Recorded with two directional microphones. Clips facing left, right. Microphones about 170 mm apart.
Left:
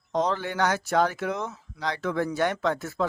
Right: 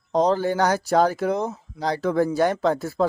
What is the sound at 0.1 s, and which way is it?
Speech, 35° right (ahead or behind).